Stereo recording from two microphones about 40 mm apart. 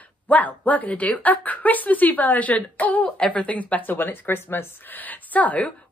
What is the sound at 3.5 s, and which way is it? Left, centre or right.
A woman's voice, left.